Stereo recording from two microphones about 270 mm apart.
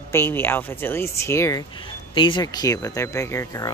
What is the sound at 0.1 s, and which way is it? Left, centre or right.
Speech, centre.